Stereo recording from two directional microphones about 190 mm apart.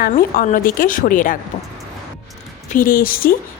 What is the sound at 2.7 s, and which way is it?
Speech, 45° left (ahead or behind).